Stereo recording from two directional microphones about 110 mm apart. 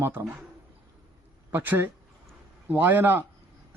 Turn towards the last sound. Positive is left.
turn(degrees=-20)  # may be behind; listen again after turning